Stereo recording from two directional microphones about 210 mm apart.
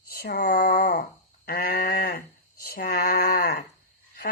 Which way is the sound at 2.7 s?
45° left (ahead or behind).